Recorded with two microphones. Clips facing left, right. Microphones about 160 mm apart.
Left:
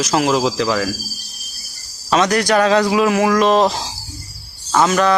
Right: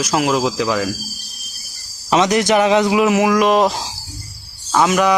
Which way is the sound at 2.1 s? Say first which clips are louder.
Right 1 dB; 20° right (ahead or behind).